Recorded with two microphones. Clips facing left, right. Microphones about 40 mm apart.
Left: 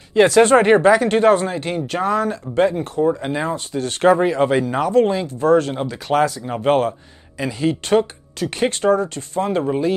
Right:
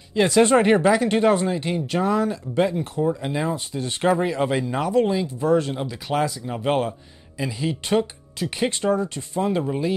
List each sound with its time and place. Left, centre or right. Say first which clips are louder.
0.4 s speech: left 3 dB; left
2.5 s speech: left 6 dB; left
3.4 s speech: left 3 dB; left
4.4 s speech: left 5 dB; left
5.2 s speech: left 5 dB; left
6.1 s speech: left 6 dB; centre
6.8 s speech: left 5 dB; left
9.7 s speech: left 5 dB; centre